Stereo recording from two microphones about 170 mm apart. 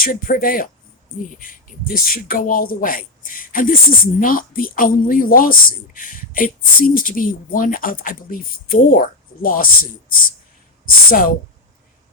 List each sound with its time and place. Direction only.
0.0 s speech: 55° left (ahead or behind)